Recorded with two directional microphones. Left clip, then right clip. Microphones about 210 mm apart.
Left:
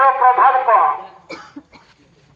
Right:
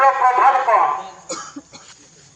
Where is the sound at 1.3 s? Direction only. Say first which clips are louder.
Right 4 dB; 55° right (ahead or behind).